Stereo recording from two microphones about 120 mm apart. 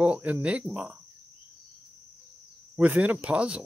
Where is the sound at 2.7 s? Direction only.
10° right (ahead or behind).